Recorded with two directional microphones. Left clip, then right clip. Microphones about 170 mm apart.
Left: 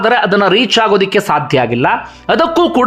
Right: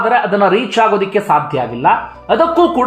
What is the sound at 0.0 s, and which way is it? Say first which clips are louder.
Speech: left 1 dB; 25° left (ahead or behind).